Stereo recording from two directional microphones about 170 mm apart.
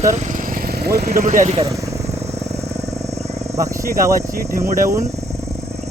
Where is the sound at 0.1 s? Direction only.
55° right (ahead or behind).